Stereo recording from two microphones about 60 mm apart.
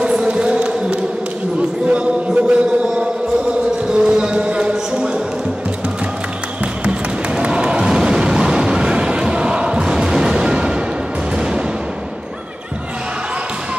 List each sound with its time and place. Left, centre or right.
0.0 s a sound: centre
3.9 s music: centre
6.8 s music: centre